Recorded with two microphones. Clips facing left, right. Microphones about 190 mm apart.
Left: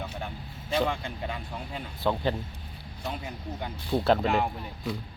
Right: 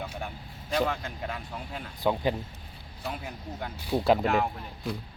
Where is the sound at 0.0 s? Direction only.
10° right (ahead or behind).